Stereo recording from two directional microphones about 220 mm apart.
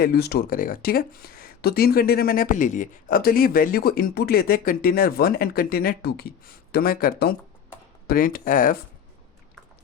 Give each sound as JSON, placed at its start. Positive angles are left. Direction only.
{"t": 0.0, "sound": "speech", "side_deg": 45}